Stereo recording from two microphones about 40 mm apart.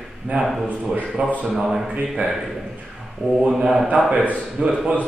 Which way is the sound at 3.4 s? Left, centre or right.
Centre.